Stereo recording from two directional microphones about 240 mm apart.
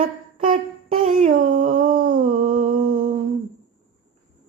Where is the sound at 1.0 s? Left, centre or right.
Right.